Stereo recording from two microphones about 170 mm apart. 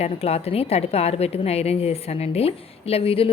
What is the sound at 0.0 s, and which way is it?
A woman's voice, 35° left (ahead or behind).